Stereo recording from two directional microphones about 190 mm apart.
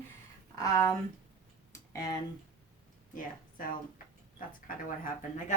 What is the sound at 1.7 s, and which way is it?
Tick, 20° left (ahead or behind).